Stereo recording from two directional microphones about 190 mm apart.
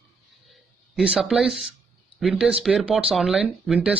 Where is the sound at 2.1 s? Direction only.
5° right (ahead or behind).